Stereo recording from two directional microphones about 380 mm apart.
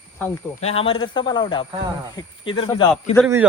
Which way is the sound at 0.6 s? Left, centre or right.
Centre.